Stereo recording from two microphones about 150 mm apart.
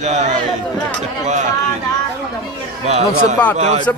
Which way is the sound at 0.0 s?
50° right (ahead or behind).